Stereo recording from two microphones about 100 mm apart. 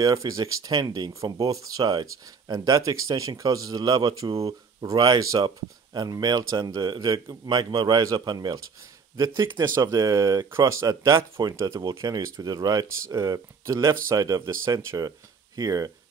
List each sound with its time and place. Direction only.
0.0 s a man's voice: 35° right (ahead or behind)